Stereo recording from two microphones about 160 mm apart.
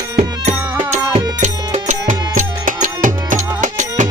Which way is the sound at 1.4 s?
45° right (ahead or behind).